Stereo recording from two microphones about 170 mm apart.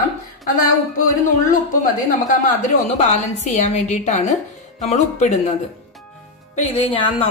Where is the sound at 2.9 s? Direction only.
45° left (ahead or behind).